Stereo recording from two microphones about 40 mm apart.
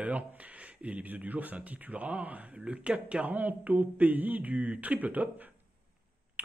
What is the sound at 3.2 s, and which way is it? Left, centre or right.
Speech, right.